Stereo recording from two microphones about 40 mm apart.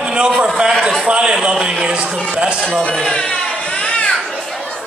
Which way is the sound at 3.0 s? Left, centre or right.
Centre.